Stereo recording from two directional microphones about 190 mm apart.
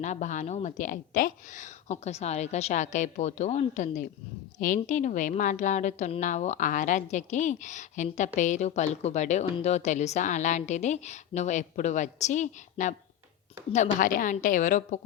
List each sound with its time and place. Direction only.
0.0 s a woman's voice: 40° left (ahead or behind)